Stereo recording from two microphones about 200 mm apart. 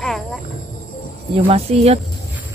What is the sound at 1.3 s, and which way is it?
Speech, 30° right (ahead or behind).